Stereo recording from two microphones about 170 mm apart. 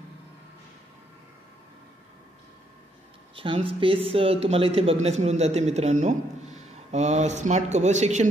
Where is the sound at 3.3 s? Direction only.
30° right (ahead or behind).